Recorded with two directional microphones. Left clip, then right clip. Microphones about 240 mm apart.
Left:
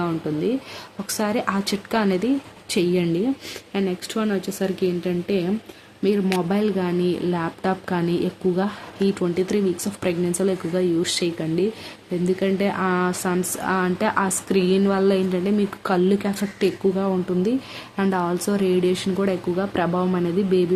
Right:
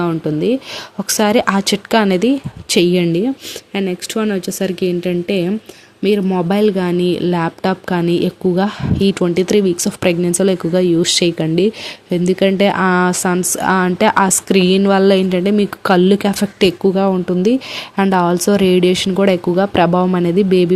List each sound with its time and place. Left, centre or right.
1.0 s speech: right